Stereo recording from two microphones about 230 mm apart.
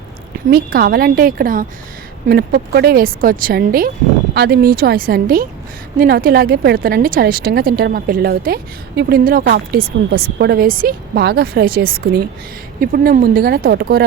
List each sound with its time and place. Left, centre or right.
0.5 s speech: right